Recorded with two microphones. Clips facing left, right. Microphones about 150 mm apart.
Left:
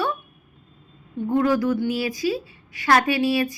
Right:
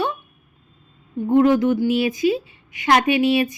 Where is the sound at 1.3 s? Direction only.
20° right (ahead or behind).